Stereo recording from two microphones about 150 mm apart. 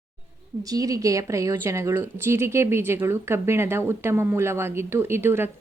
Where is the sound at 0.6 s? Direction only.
25° right (ahead or behind).